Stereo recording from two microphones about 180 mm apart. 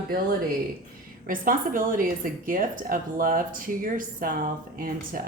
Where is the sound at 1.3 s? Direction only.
50° right (ahead or behind).